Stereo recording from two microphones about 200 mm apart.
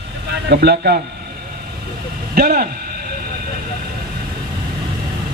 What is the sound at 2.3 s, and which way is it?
Speech, 45° right (ahead or behind).